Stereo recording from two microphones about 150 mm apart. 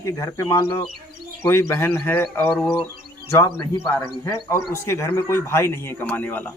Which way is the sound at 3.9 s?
20° left (ahead or behind).